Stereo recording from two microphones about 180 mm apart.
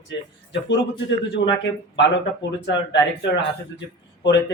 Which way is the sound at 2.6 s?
75° left (ahead or behind).